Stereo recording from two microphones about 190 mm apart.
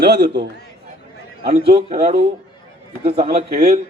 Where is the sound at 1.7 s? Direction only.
35° right (ahead or behind).